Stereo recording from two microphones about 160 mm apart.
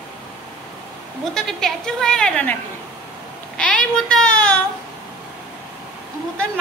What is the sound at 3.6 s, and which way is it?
Child singing, 5° left (ahead or behind).